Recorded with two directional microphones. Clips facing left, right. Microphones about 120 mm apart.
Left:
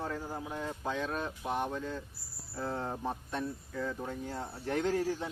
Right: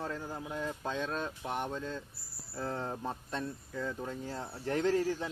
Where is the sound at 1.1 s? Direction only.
20° left (ahead or behind).